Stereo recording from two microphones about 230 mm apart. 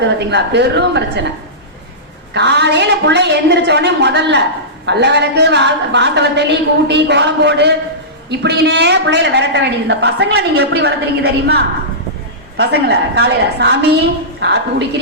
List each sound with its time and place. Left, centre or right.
0.2 s a woman's voice: right
2.3 s a woman's voice: right